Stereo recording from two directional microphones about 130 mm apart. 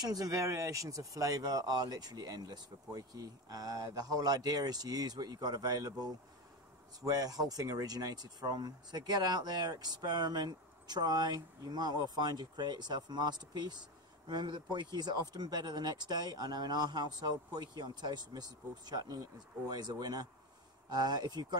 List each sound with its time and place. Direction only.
0.0 s speech: 30° right (ahead or behind)
7.1 s speech: 30° right (ahead or behind)